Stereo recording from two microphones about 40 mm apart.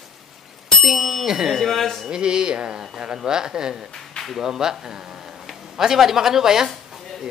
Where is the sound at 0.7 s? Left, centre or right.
Centre.